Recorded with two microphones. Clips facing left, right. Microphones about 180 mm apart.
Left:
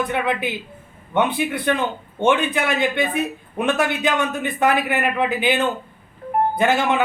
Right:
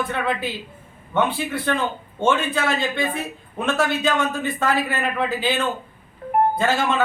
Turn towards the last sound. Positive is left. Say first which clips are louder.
# left 2 dB
turn(degrees=20)  # may be behind; listen again after turning